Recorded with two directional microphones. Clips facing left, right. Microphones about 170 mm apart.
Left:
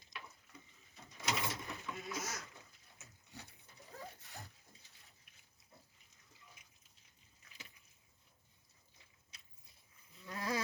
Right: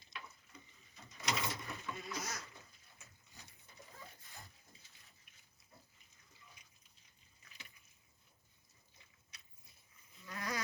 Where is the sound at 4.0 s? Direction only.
75° left (ahead or behind).